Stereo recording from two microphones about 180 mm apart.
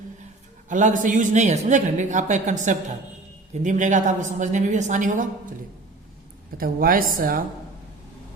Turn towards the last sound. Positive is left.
turn(degrees=-55)  # may be behind; listen again after turning